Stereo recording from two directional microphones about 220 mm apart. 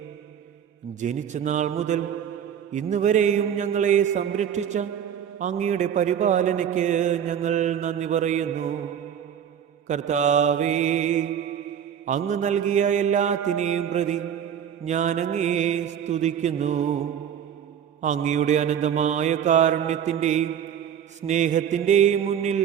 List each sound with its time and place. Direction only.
1.0 s a man's voice: 35° right (ahead or behind)
9.8 s a man's voice: 30° right (ahead or behind)
18.0 s a man's voice: 35° right (ahead or behind)